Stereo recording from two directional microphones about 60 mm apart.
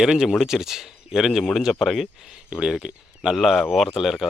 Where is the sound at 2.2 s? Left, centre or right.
Centre.